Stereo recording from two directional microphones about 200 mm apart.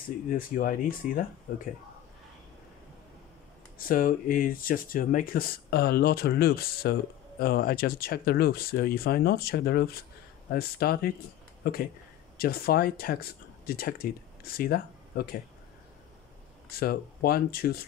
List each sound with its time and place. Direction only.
0.3 s speech: 45° left (ahead or behind)
3.7 s speech: 45° left (ahead or behind)
16.7 s speech: 50° left (ahead or behind)